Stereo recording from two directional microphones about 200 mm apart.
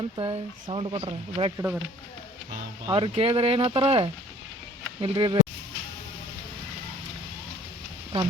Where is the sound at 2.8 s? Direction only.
25° right (ahead or behind).